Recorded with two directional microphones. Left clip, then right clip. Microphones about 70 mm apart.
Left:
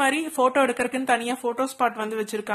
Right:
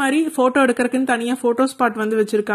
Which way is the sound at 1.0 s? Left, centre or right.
Right.